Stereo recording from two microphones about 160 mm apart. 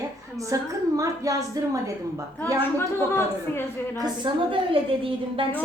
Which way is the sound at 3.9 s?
25° right (ahead or behind).